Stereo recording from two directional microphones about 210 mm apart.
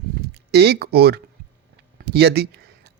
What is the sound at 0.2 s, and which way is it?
Speech, 50° right (ahead or behind).